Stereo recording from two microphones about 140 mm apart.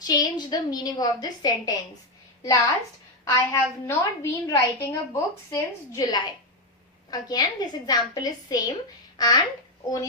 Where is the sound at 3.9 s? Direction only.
20° left (ahead or behind).